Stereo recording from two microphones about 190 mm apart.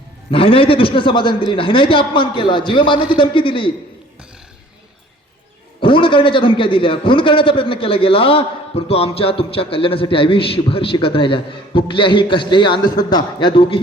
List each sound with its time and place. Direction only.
0.3 s a man's voice: 30° left (ahead or behind)
5.8 s a man's voice: 25° left (ahead or behind)